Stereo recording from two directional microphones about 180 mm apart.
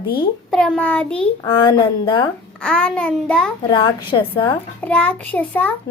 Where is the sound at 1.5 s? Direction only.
25° left (ahead or behind).